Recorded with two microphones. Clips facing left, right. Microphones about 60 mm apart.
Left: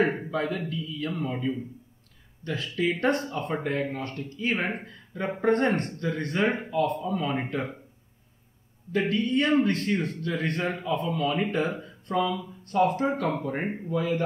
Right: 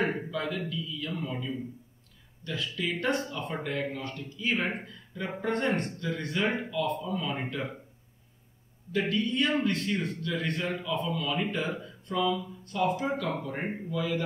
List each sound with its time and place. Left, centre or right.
0.0 s a man's voice: left
8.9 s a man's voice: left